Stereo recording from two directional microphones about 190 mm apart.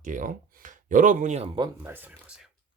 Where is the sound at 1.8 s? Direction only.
10° right (ahead or behind).